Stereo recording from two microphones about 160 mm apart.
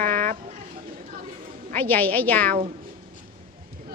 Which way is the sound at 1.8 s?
10° left (ahead or behind).